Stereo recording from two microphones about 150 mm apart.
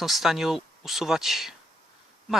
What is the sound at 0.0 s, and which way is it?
Speech, centre (ahead or behind).